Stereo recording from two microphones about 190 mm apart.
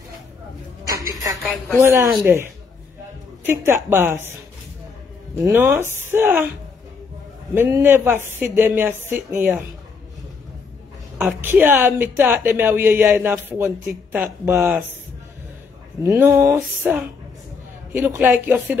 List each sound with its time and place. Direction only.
0.8 s a sound: 15° right (ahead or behind)
1.4 s a woman's voice: centre (ahead or behind)
1.8 s a woman's voice: 15° right (ahead or behind)
5.4 s a woman's voice: 15° right (ahead or behind)
7.5 s a woman's voice: 10° right (ahead or behind)
11.1 s a woman's voice: 5° right (ahead or behind)
16.0 s a woman's voice: 15° right (ahead or behind)
17.9 s a woman's voice: 10° right (ahead or behind)